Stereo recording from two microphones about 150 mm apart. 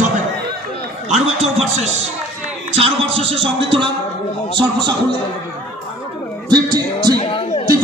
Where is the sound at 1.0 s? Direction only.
45° right (ahead or behind); by 4.9 s 30° right (ahead or behind).